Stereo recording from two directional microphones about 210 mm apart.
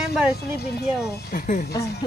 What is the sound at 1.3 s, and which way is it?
Speech, 40° left (ahead or behind).